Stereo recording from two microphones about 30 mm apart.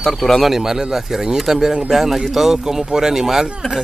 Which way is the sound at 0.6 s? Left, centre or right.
Right.